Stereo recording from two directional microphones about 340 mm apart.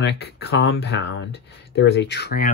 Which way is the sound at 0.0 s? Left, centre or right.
Left.